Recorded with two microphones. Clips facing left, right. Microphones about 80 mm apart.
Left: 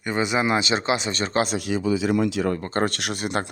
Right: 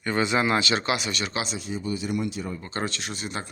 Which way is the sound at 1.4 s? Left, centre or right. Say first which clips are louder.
Left 8 dB; left.